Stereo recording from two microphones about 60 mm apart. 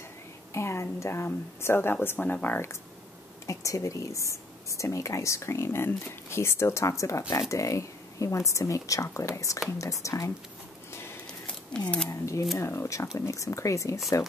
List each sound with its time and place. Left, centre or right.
0.5 s a woman's voice: left
2.1 s speech: left
3.4 s a woman's voice: left
11.2 s a sound: centre
12.1 s a woman's voice: left